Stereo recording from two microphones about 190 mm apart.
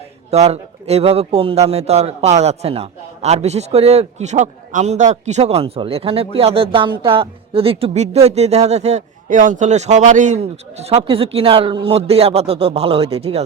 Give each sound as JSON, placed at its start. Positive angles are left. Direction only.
{"t": 0.3, "sound": "a man's voice", "side_deg": -35}